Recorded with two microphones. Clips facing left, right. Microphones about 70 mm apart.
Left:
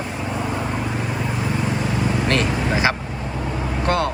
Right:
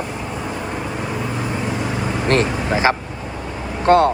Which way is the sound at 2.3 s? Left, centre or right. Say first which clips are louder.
Right 7 dB; right.